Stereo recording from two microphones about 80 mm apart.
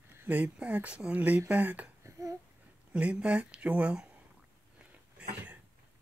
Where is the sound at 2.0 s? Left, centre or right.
Right.